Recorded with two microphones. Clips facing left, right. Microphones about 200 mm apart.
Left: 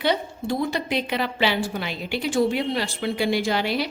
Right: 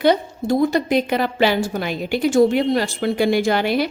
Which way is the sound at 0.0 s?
45° right (ahead or behind).